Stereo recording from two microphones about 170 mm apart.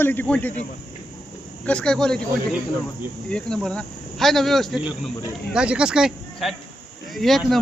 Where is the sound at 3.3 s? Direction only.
5° left (ahead or behind).